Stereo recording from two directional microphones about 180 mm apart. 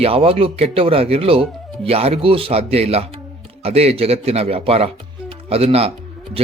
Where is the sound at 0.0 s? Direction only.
30° right (ahead or behind).